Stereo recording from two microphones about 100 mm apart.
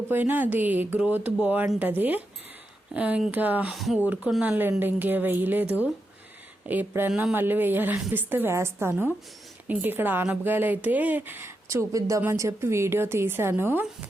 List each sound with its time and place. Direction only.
0.1 s speech: 20° right (ahead or behind)
3.8 s speech: centre (ahead or behind)
4.0 s speech: 15° right (ahead or behind)